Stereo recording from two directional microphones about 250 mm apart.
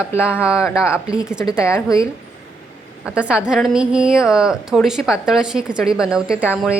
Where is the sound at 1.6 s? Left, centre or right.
Centre.